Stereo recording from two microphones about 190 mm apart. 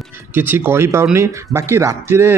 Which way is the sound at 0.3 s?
10° right (ahead or behind).